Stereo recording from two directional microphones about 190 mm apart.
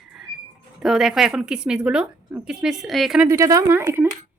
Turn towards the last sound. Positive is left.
turn(degrees=-10)  # may be behind; listen again after turning